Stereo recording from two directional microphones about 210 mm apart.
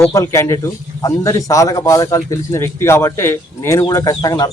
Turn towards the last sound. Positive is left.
turn(degrees=20)  # may be behind; listen again after turning